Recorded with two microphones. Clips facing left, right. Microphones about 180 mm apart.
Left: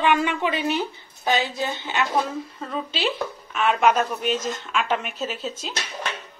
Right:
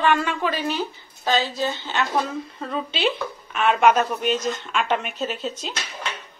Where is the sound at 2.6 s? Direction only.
Centre (ahead or behind).